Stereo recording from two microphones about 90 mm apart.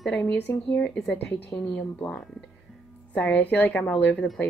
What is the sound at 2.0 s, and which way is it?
A woman's voice, 10° left (ahead or behind).